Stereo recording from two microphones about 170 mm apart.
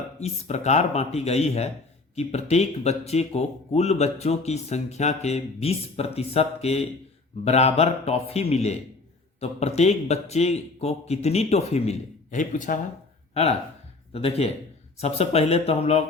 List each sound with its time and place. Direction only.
0.2 s speech: 40° left (ahead or behind)
14.1 s speech: 35° left (ahead or behind)